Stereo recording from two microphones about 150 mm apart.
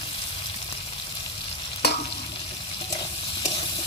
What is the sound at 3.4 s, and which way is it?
Sizzle, 35° left (ahead or behind).